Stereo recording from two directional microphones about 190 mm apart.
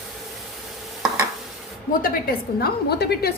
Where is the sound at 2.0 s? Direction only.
50° left (ahead or behind).